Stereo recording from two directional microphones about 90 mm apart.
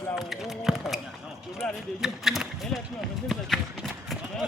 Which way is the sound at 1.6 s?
10° left (ahead or behind).